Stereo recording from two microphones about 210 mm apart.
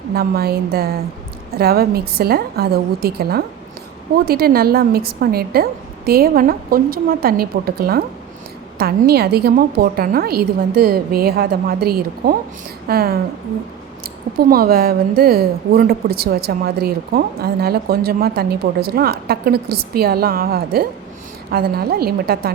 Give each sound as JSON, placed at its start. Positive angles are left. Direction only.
{"t": 0.1, "sound": "a woman's voice", "side_deg": -45}
{"t": 14.3, "sound": "a woman's voice", "side_deg": -45}